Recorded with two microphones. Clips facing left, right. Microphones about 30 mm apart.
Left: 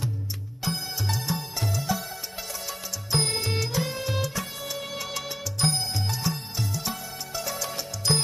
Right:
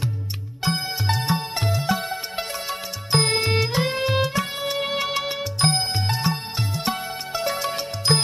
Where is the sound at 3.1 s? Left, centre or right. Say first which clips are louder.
Right 6 dB; right.